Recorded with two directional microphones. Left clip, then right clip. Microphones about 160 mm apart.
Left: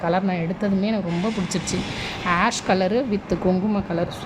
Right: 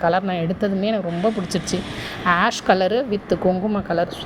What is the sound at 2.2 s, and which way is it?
A woman's voice, 20° right (ahead or behind).